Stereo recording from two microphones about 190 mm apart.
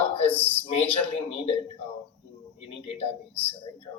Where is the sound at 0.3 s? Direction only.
10° left (ahead or behind).